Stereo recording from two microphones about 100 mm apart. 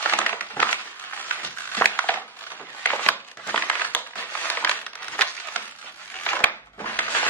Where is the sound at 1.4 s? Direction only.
15° left (ahead or behind).